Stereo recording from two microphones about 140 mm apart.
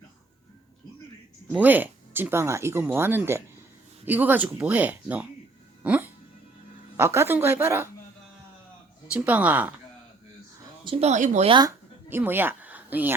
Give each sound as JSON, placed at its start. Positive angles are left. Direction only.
{"t": 1.5, "sound": "speech", "side_deg": -10}
{"t": 5.8, "sound": "music", "side_deg": -10}
{"t": 6.9, "sound": "speech", "side_deg": -20}
{"t": 9.0, "sound": "speech", "side_deg": -10}
{"t": 10.8, "sound": "speech", "side_deg": -40}
{"t": 11.1, "sound": "speech", "side_deg": -60}
{"t": 11.4, "sound": "speech", "side_deg": -35}
{"t": 12.0, "sound": "speech", "side_deg": -15}